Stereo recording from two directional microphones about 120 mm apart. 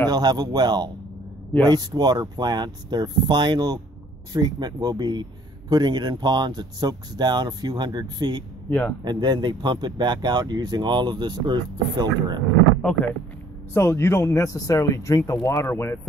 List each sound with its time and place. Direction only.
0.1 s speech: 35° right (ahead or behind)
8.6 s speech: 10° left (ahead or behind)
9.0 s speech: 35° right (ahead or behind)
13.7 s speech: 20° left (ahead or behind)